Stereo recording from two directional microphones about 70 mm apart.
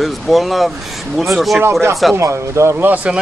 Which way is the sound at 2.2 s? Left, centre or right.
Right.